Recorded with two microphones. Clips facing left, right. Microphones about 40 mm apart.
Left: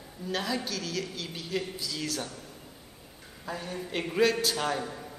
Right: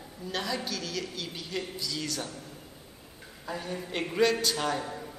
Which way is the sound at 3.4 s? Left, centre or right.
Centre.